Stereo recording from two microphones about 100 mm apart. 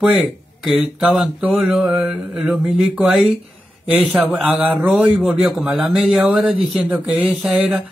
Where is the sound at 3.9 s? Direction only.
15° right (ahead or behind).